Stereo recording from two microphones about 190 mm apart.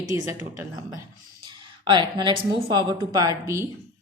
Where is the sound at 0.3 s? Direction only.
15° right (ahead or behind).